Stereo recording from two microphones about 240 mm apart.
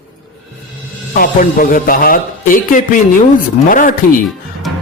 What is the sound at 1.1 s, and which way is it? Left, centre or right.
Speech, left.